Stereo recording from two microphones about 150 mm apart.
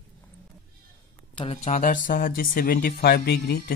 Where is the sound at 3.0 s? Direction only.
90° left.